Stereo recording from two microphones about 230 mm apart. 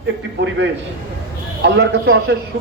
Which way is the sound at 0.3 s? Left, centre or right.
Right.